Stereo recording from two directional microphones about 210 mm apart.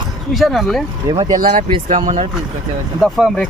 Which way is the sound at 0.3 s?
Centre (ahead or behind).